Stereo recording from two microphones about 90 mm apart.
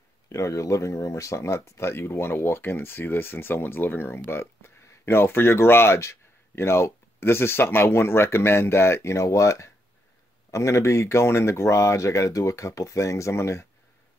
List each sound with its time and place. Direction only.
0.3 s speech: 35° left (ahead or behind)